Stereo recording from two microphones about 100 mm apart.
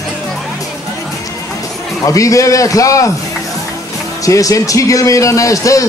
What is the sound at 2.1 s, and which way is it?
A man's voice, 35° left (ahead or behind).